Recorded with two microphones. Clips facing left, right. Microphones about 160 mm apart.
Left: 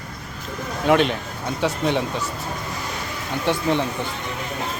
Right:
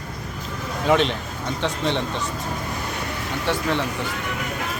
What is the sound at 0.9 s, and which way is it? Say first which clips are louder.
A man's voice: left 2 dB; 5° left (ahead or behind).